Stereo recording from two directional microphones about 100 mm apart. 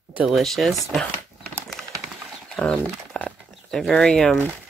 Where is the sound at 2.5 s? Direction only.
5° left (ahead or behind).